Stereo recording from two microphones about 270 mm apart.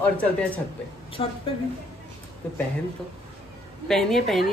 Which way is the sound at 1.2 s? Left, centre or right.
Left.